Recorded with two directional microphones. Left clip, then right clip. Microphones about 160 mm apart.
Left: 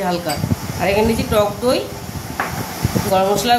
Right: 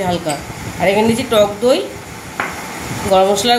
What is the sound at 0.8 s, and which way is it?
Speech, 40° right (ahead or behind).